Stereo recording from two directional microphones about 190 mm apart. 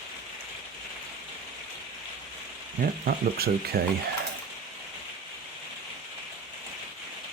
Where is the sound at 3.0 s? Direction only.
55° right (ahead or behind).